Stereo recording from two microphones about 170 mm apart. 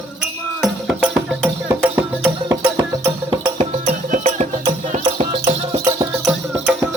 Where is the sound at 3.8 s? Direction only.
45° right (ahead or behind).